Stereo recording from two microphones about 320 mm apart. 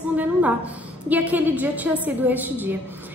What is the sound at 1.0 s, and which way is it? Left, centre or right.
A woman's voice, centre.